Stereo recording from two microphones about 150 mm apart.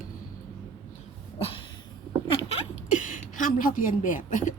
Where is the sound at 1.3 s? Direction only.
40° left (ahead or behind).